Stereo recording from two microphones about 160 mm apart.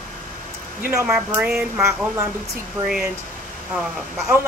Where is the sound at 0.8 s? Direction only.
10° right (ahead or behind).